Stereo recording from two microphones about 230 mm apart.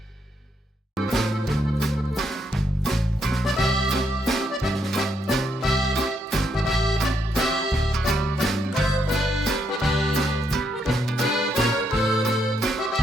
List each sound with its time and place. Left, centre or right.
0.9 s music: centre